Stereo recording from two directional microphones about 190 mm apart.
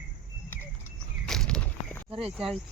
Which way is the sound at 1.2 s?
5° left (ahead or behind).